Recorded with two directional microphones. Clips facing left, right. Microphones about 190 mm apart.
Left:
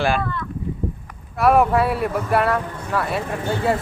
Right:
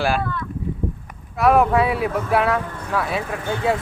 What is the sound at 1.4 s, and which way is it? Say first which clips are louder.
Speech: even; centre (ahead or behind).